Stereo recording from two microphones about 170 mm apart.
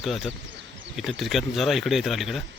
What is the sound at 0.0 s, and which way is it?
Speech, centre (ahead or behind).